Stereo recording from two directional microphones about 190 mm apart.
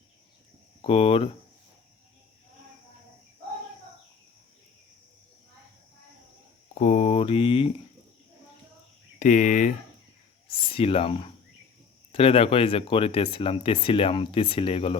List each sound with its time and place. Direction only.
0.8 s speech: 30° left (ahead or behind)
6.7 s a sound: 40° left (ahead or behind)
9.1 s speech: 40° left (ahead or behind)
10.7 s speech: 30° left (ahead or behind)